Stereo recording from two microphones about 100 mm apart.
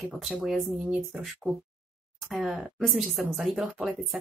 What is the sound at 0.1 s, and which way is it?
Speech, centre (ahead or behind).